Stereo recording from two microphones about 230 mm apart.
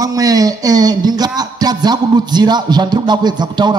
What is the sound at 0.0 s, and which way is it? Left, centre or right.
A man's voice, centre.